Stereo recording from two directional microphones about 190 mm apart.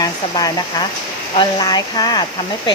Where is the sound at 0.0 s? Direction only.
20° left (ahead or behind).